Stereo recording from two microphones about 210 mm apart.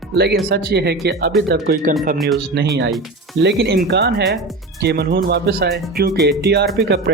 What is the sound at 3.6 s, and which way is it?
Speech, 50° right (ahead or behind).